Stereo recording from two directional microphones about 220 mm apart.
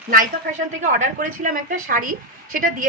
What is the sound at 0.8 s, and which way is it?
A woman's voice, 35° right (ahead or behind).